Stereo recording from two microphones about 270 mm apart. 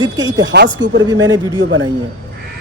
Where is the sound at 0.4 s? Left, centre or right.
Right.